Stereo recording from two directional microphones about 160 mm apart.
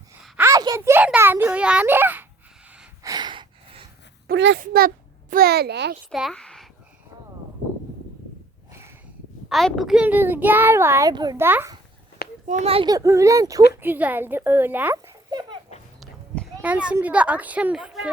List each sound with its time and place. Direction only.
0.3 s a sound: 20° right (ahead or behind)
0.9 s a sound: 10° right (ahead or behind)
3.0 s a sound: 25° right (ahead or behind)
4.3 s a child's voice: 90° right
6.1 s speech: centre (ahead or behind)
9.5 s a child's voice: centre (ahead or behind); by 11.3 s 25° right (ahead or behind)
11.3 s a child's voice: 15° right (ahead or behind)
12.5 s speech: 40° right (ahead or behind)
12.9 s speech: 20° right (ahead or behind)
13.8 s a child's voice: 10° right (ahead or behind)
15.3 s a sound: 25° right (ahead or behind)
16.0 s walk: 5° left (ahead or behind)
16.6 s a child's voice: 10° right (ahead or behind)